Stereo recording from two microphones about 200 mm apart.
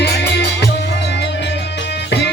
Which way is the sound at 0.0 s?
55° left (ahead or behind).